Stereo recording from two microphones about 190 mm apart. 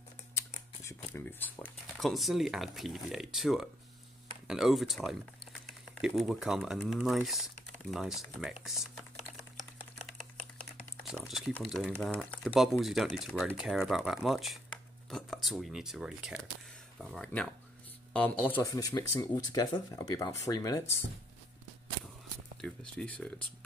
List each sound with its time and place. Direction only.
0.4 s speech: 10° left (ahead or behind)
11.1 s speech: centre (ahead or behind)
18.6 s speech: 20° left (ahead or behind)
22.6 s speech: 5° left (ahead or behind)